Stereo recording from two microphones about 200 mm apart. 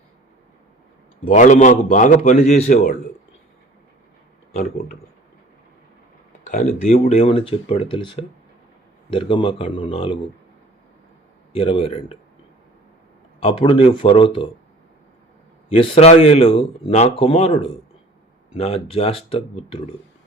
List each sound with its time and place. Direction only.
1.3 s a man's voice: 40° left (ahead or behind)
6.4 s a sound: 35° left (ahead or behind)
6.8 s speech: 35° left (ahead or behind)
11.5 s speech: 25° left (ahead or behind)
13.4 s speech: 30° left (ahead or behind)
15.7 s speech: 30° left (ahead or behind)